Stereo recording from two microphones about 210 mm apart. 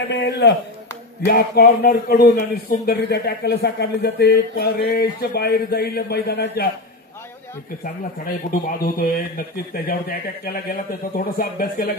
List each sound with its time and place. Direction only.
0.1 s a man's voice: 55° left (ahead or behind)
8.5 s a man's voice: 40° left (ahead or behind)